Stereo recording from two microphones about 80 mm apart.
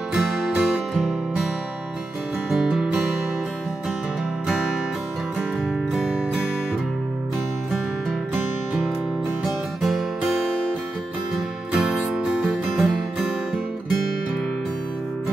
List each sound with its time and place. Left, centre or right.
0.1 s music: centre
2.5 s music: centre
9.4 s music: centre
11.7 s music: centre